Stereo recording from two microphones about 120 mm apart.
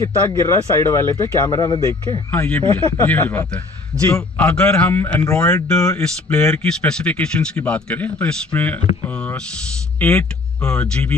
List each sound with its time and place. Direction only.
0.5 s speech: 25° left (ahead or behind)
1.4 s speech: 35° left (ahead or behind)
2.3 s speech: 10° left (ahead or behind)